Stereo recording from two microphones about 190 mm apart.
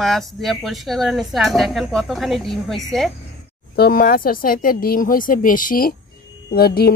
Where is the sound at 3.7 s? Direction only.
50° left (ahead or behind).